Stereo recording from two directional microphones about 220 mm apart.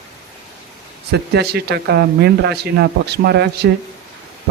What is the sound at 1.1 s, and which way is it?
Speech, 50° right (ahead or behind).